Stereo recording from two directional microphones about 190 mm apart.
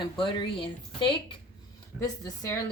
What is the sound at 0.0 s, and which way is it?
Speech, 25° left (ahead or behind).